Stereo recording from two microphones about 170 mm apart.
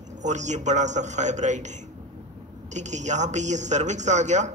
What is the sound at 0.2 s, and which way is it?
A man's voice, 45° right (ahead or behind).